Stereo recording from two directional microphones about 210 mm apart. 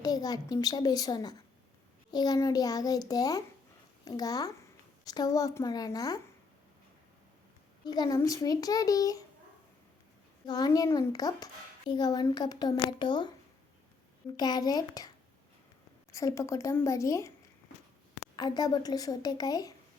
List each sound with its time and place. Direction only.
0.0 s a child's voice: 20° left (ahead or behind)
7.9 s a child's voice: 20° left (ahead or behind)
10.4 s a child's voice: 20° left (ahead or behind)
14.3 s speech: 20° left (ahead or behind)
16.1 s a child's voice: 15° left (ahead or behind)
18.3 s a child's voice: 20° left (ahead or behind)